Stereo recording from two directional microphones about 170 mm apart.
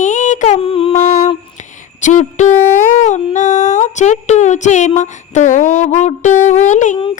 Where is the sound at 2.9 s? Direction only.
45° left (ahead or behind).